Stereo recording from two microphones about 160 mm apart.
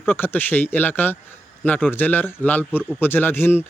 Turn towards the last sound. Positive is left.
turn(degrees=15)  # may be behind; listen again after turning